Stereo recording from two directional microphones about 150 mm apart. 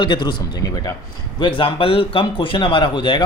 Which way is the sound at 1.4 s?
35° left (ahead or behind).